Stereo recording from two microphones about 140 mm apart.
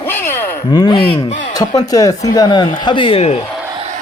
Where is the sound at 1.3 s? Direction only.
65° left (ahead or behind).